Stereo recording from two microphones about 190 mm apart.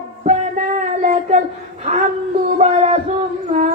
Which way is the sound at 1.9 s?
35° right (ahead or behind).